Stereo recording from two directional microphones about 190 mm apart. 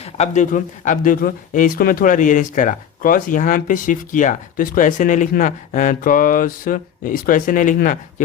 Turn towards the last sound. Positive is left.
turn(degrees=45)  # may be behind; listen again after turning